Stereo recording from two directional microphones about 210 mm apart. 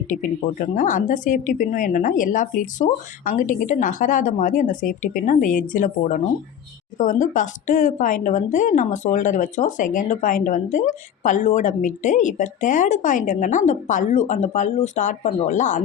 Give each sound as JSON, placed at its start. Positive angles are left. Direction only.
{"t": 0.1, "sound": "a woman's voice", "side_deg": 40}